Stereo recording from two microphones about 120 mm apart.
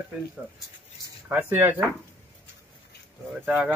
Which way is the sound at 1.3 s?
15° right (ahead or behind).